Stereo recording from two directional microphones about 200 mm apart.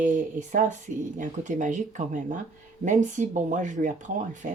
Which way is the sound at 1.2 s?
40° right (ahead or behind).